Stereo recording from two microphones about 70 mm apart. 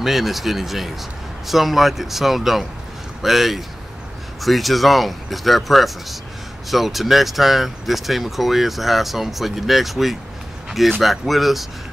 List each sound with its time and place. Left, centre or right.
0.0 s speech: centre